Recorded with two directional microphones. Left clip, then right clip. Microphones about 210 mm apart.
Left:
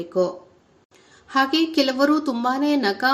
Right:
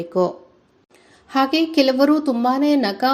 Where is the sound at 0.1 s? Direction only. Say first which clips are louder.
Right 2 dB; 15° right (ahead or behind).